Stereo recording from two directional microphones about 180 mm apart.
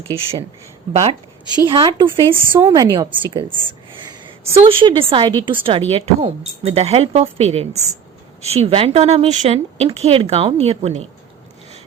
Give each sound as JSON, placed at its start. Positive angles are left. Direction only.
{"t": 1.5, "sound": "a woman's voice", "side_deg": -25}
{"t": 2.6, "sound": "a woman's voice", "side_deg": -20}